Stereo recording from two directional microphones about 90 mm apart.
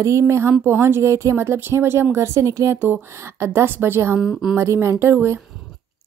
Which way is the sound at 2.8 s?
25° right (ahead or behind).